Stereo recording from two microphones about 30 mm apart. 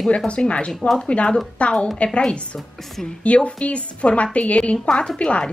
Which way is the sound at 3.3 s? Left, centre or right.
Left.